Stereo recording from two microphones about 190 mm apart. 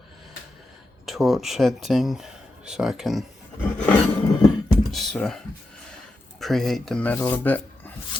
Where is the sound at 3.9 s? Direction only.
15° left (ahead or behind).